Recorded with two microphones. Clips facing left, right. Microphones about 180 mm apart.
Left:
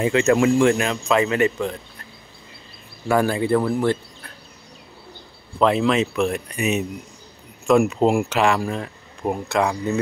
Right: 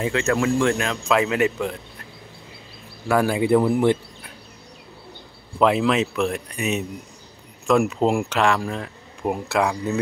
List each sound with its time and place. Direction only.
0.0 s speech: 15° left (ahead or behind); by 1.8 s 5° right (ahead or behind)
3.1 s speech: centre (ahead or behind)
3.3 s speech: 15° right (ahead or behind)
5.6 s speech: 5° right (ahead or behind)